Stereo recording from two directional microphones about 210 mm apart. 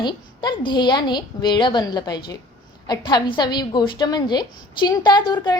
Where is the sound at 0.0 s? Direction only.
20° left (ahead or behind).